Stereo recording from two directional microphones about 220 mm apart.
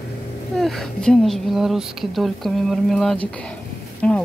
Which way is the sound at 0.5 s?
Centre (ahead or behind).